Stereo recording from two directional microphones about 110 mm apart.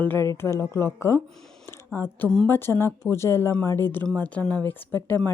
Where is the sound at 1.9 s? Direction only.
25° left (ahead or behind).